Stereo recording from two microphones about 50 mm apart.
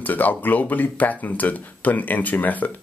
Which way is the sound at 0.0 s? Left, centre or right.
Left.